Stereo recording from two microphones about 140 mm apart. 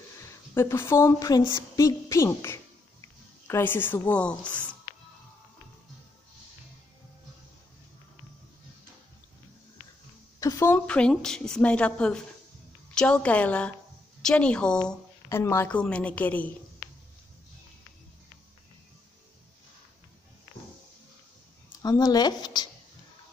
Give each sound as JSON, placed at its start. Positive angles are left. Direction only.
{"t": 0.6, "sound": "a woman's voice", "side_deg": 20}
{"t": 10.4, "sound": "a sound", "side_deg": 25}
{"t": 10.7, "sound": "a woman's voice", "side_deg": 10}
{"t": 15.2, "sound": "a woman's voice", "side_deg": 20}
{"t": 21.8, "sound": "speech", "side_deg": 25}